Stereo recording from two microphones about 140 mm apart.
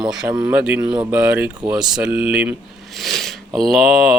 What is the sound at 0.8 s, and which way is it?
Speech, 30° right (ahead or behind).